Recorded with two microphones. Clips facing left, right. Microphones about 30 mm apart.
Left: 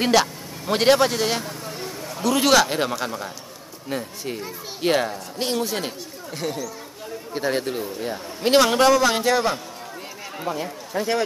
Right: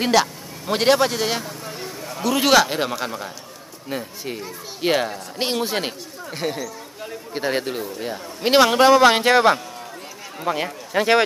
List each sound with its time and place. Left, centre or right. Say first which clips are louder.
0.0 s a man's voice: even; centre
5.1 s a man's voice: right 1 dB; right
8.9 s speech: right 5 dB; right
10.5 s speech: right 6 dB; right